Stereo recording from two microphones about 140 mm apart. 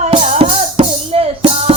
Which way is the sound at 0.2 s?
50° right (ahead or behind).